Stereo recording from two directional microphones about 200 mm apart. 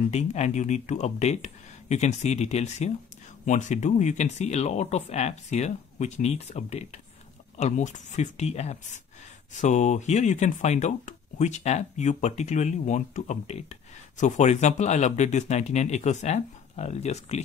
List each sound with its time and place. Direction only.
0.1 s speech: 35° left (ahead or behind)